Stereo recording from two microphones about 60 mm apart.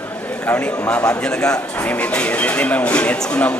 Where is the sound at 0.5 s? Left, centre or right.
Left.